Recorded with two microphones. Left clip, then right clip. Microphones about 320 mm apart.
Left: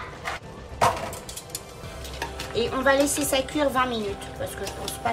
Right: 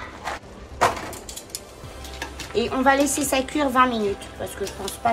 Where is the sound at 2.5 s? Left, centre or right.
Right.